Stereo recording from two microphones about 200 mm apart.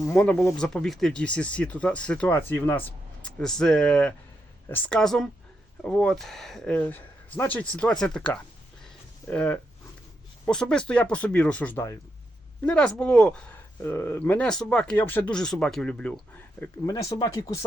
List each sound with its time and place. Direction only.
0.0 s speech: 5° left (ahead or behind)
8.8 s a sound: 5° left (ahead or behind)
10.4 s speech: 5° left (ahead or behind)
16.8 s speech: 15° left (ahead or behind)